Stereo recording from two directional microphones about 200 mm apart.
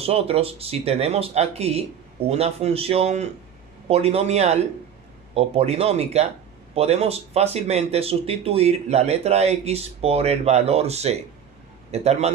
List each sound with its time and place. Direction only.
0.0 s speech: 30° right (ahead or behind)